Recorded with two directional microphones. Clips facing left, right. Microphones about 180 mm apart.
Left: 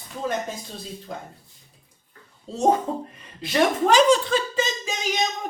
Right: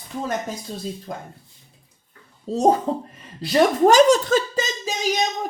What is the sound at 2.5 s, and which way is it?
Speech, 40° right (ahead or behind).